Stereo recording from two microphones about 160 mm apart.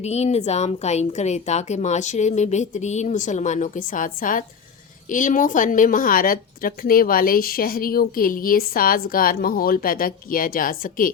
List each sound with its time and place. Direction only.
0.0 s a woman's voice: 45° left (ahead or behind); by 11.1 s 60° left (ahead or behind)